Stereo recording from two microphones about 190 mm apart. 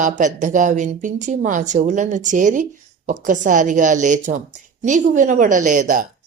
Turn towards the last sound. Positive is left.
turn(degrees=-40)  # may be behind; listen again after turning